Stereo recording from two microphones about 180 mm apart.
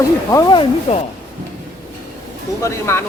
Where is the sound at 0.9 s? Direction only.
35° left (ahead or behind).